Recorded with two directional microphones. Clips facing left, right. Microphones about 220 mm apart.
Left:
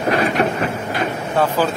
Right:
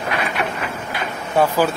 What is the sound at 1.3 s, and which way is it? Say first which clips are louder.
Speech: right 1 dB; 10° right (ahead or behind).